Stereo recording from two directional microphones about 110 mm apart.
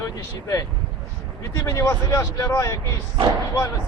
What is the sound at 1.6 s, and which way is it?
Speech, 30° left (ahead or behind).